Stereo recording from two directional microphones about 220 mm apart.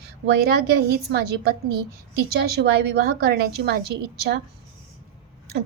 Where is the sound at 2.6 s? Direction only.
50° right (ahead or behind).